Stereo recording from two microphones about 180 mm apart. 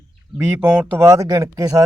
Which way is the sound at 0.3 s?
15° right (ahead or behind).